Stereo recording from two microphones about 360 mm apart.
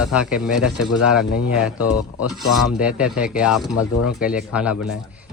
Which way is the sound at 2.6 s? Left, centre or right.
Centre.